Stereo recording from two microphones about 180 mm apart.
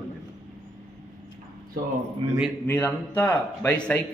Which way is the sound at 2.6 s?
10° left (ahead or behind).